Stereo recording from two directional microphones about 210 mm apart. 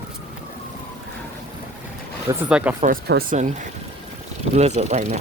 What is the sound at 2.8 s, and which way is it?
Speech, 45° right (ahead or behind).